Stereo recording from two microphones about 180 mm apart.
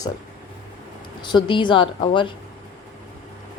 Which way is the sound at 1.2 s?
25° left (ahead or behind).